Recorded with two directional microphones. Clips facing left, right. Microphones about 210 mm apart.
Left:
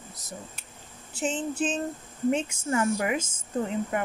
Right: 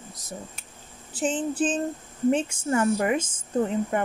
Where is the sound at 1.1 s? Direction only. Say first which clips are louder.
Right 3 dB; 35° right (ahead or behind).